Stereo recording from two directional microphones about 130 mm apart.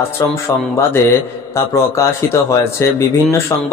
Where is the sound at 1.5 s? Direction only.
20° left (ahead or behind).